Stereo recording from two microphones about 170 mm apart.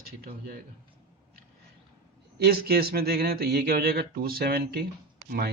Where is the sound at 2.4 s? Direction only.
65° right (ahead or behind).